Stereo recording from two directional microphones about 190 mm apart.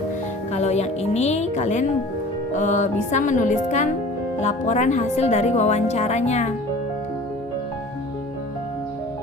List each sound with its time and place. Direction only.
0.5 s speech: 35° left (ahead or behind)